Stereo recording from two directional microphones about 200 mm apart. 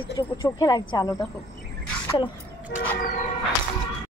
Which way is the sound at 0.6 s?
20° left (ahead or behind).